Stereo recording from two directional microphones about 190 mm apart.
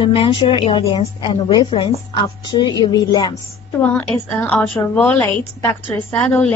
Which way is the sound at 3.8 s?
5° left (ahead or behind).